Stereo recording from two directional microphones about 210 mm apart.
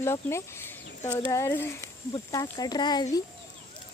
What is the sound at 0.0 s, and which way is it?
Speech, 10° left (ahead or behind).